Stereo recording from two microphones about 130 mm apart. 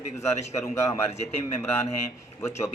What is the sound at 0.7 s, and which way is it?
Speech, 25° left (ahead or behind).